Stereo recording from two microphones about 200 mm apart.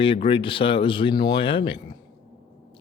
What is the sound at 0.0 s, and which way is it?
Speech, 25° left (ahead or behind).